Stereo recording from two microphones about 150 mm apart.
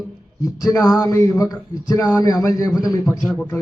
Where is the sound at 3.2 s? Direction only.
10° left (ahead or behind).